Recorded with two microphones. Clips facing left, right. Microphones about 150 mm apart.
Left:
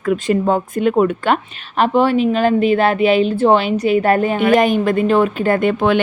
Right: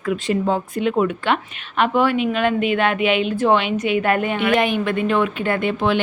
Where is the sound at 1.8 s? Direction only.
35° left (ahead or behind).